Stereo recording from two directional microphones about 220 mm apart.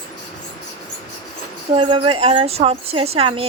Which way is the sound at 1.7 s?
25° right (ahead or behind).